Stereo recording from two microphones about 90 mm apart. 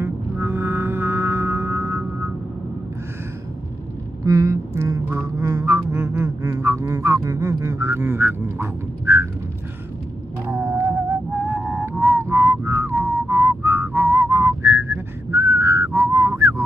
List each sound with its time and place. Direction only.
0.0 s music: 25° right (ahead or behind)
4.2 s quack: 35° right (ahead or behind)
10.4 s whale vocalization: 25° right (ahead or behind)
11.3 s music: 15° right (ahead or behind)
11.8 s whistling: 25° right (ahead or behind)